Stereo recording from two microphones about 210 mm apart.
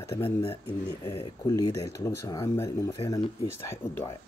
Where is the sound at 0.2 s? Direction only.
25° left (ahead or behind).